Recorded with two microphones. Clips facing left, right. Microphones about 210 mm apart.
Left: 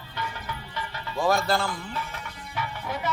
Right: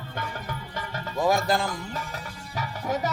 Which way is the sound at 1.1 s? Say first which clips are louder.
Right 1 dB; 15° right (ahead or behind).